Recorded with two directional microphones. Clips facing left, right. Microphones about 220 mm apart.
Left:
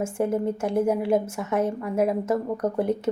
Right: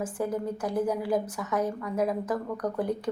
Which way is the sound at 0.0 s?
25° left (ahead or behind).